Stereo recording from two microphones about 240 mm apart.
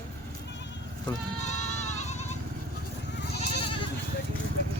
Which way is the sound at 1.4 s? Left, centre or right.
Left.